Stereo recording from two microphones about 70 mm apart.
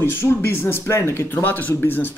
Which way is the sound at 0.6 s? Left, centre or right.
Left.